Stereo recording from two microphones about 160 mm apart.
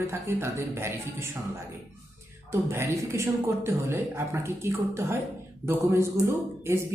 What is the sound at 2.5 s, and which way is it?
A man's voice, 15° right (ahead or behind).